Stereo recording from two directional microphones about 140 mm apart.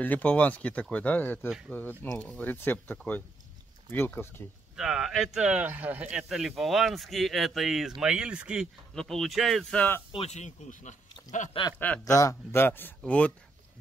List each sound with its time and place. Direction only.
0.0 s speech: 10° left (ahead or behind)
4.7 s speech: 5° right (ahead or behind); by 10.0 s 10° left (ahead or behind)
10.1 s speech: 50° left (ahead or behind)
12.0 s speech: 25° left (ahead or behind); by 13.3 s 10° left (ahead or behind)